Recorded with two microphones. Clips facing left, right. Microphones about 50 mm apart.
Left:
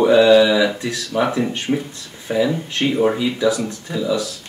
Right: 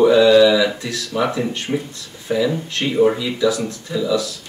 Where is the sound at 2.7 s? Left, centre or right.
Centre.